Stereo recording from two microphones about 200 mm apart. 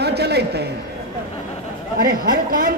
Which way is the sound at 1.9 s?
45° right (ahead or behind).